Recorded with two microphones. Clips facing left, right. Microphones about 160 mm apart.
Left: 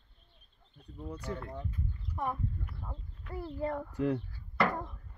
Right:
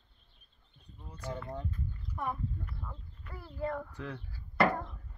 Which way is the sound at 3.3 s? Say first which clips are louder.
Left 2 dB; 25° left (ahead or behind).